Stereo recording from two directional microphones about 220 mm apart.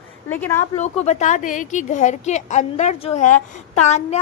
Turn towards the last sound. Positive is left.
turn(degrees=30)  # may be behind; listen again after turning